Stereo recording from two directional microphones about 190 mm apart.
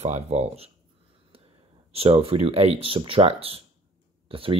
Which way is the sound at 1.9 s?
30° right (ahead or behind).